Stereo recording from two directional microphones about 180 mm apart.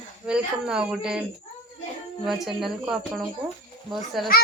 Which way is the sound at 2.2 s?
Centre (ahead or behind).